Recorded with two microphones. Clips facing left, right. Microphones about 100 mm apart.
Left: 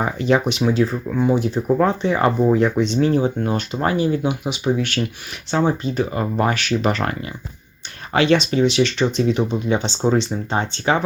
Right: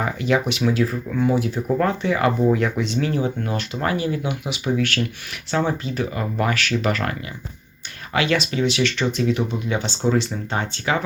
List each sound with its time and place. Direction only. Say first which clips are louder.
0.0 s speech: left 3 dB; 30° left (ahead or behind)